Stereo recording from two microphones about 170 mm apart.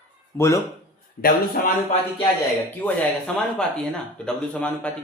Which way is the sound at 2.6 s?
10° left (ahead or behind).